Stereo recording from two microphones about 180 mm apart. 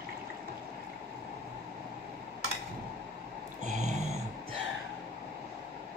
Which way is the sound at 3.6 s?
40° right (ahead or behind).